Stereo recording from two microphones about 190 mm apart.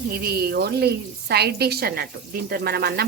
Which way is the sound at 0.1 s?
55° right (ahead or behind).